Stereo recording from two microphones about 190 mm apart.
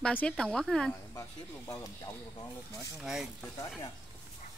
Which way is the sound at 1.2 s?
15° left (ahead or behind).